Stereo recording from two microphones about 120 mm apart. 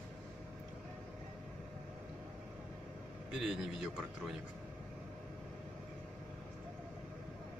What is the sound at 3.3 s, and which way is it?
Speech, 5° right (ahead or behind).